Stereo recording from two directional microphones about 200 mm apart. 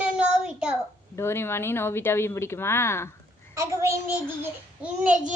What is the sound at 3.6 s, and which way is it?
Speech, 15° right (ahead or behind).